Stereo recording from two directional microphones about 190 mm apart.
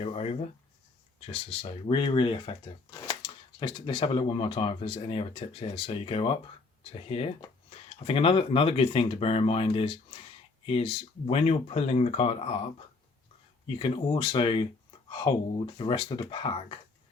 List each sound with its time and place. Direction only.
0.0 s speech: 30° left (ahead or behind)
13.7 s speech: 30° left (ahead or behind)